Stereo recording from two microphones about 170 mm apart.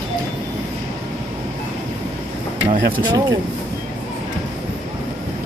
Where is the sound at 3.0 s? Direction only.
25° right (ahead or behind).